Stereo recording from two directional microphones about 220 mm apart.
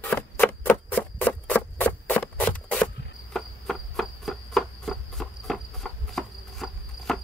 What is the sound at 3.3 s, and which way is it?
Cricket, centre (ahead or behind).